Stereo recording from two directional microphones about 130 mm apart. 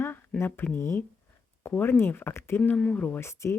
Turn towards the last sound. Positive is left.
turn(degrees=20)  # may be behind; listen again after turning